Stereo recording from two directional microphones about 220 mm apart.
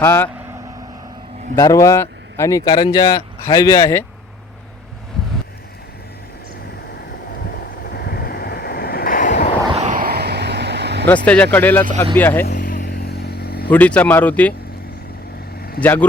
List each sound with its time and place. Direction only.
0.0 s speech: 10° left (ahead or behind)
1.5 s speech: 15° left (ahead or behind)
7.9 s wind noise: 45° left (ahead or behind)
9.7 s vehicle: 35° right (ahead or behind); by 11.0 s 50° right (ahead or behind)
11.5 s speech: 10° left (ahead or behind)
12.5 s vehicle: 40° left (ahead or behind)
13.7 s speech: 5° left (ahead or behind)
15.8 s speech: 5° left (ahead or behind)